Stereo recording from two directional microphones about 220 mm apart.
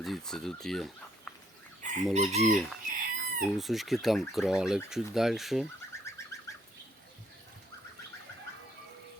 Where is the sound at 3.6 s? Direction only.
Centre (ahead or behind).